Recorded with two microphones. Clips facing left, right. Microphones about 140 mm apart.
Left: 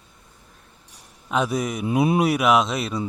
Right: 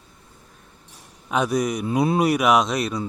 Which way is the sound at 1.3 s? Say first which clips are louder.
Right 2 dB; centre (ahead or behind).